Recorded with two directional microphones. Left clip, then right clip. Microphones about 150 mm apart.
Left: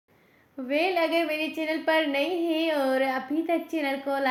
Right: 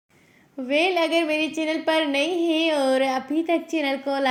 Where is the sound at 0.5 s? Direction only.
30° right (ahead or behind).